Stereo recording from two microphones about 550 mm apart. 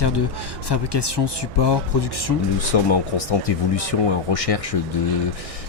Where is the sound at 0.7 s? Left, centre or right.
Left.